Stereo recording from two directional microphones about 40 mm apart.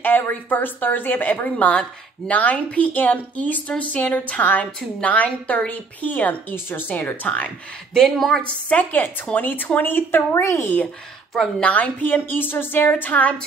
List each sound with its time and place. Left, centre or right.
0.0 s a woman's voice: left
2.9 s a woman's voice: left
7.9 s speech: centre
8.5 s a woman's voice: left
8.9 s a woman's voice: left
11.6 s a woman's voice: left
12.9 s a woman's voice: left